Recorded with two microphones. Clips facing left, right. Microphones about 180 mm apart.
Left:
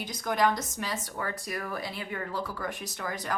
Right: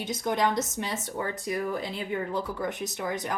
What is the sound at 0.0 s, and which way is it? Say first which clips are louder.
Speech: right 1 dB; 25° right (ahead or behind).